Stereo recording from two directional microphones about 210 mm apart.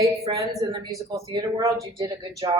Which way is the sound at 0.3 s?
25° right (ahead or behind).